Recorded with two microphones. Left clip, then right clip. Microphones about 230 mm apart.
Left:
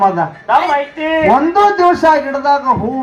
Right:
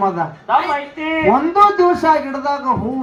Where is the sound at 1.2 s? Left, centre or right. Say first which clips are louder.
Left 2 dB; left.